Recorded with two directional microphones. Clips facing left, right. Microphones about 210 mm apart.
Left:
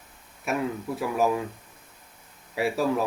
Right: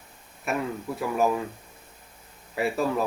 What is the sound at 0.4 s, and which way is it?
Speech, centre (ahead or behind).